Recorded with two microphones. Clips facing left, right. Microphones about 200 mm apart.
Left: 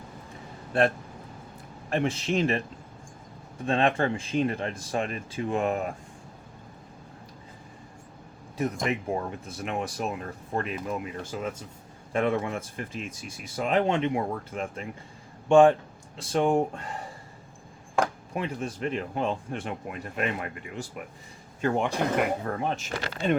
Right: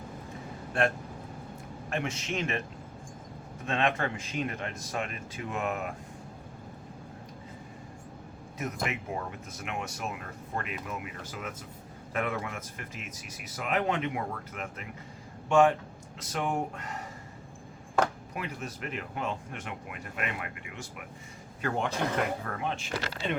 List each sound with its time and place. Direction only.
0.7 s speech: 35° left (ahead or behind)
3.7 s speech: 35° left (ahead or behind)
8.9 s a man's voice: 35° left (ahead or behind)
18.3 s speech: 30° left (ahead or behind)
21.8 s speech: 15° left (ahead or behind)
22.4 s speech: 35° left (ahead or behind)